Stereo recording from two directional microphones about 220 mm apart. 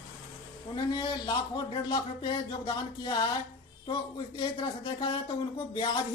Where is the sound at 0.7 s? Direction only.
20° left (ahead or behind).